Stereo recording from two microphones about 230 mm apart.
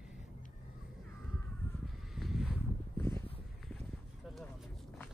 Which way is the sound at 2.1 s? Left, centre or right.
Centre.